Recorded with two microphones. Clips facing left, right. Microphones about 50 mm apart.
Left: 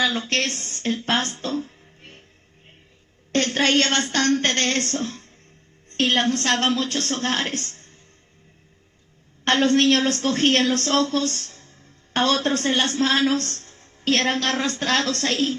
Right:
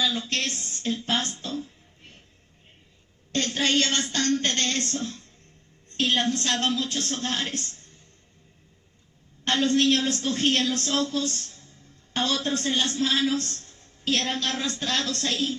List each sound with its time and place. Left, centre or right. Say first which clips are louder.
0.0 s music: left 4 dB; left
3.3 s a woman's voice: left 5 dB; left
9.4 s a woman's voice: left 4 dB; left